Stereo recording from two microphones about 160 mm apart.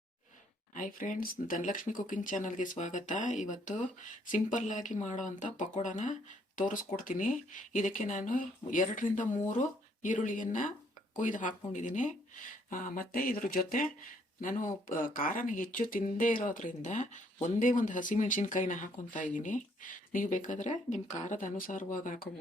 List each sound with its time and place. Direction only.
0.7 s speech: 60° left (ahead or behind)